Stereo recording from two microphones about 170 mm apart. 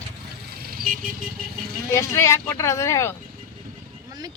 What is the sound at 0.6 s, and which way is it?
Vehicle, 60° right (ahead or behind).